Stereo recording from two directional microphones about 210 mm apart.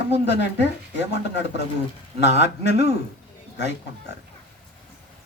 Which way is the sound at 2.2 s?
55° left (ahead or behind).